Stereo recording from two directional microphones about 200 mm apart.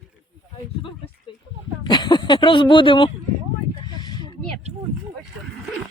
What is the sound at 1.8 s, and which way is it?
Speech, 20° left (ahead or behind).